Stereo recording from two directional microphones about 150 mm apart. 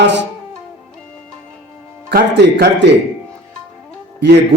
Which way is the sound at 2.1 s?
90° right.